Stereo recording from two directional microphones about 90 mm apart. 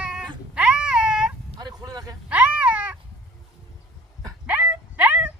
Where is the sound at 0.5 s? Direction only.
10° right (ahead or behind).